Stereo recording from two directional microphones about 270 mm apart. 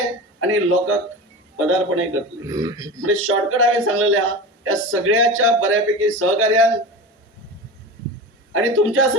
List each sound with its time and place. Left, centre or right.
0.3 s a man's voice: right
2.5 s speech: centre
3.1 s a man's voice: right
8.5 s a man's voice: right